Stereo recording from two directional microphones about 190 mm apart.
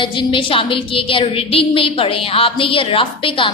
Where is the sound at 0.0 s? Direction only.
25° left (ahead or behind).